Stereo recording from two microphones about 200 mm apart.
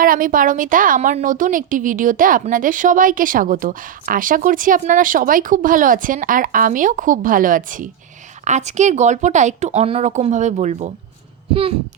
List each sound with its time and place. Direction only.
0.0 s a woman's voice: 45° right (ahead or behind); by 11.6 s 25° right (ahead or behind)